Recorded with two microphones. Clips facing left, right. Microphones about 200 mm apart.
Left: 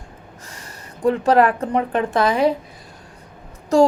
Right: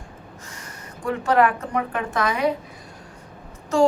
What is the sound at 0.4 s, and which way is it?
A woman's voice, 35° left (ahead or behind).